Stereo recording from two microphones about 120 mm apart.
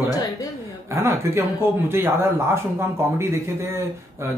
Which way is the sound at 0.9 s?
20° right (ahead or behind).